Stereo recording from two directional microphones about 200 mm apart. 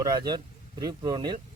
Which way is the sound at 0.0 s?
20° right (ahead or behind).